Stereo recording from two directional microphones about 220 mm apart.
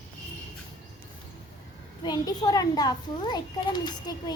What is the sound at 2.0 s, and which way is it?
A child's voice, 15° left (ahead or behind).